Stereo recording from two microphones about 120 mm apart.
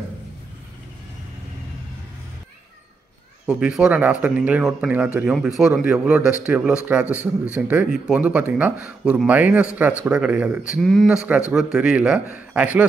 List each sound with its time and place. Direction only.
3.4 s speech: 10° right (ahead or behind)
7.1 s a man's voice: 25° left (ahead or behind)
7.5 s speech: 10° right (ahead or behind)
10.8 s speech: 5° left (ahead or behind)
11.1 s speech: 10° right (ahead or behind)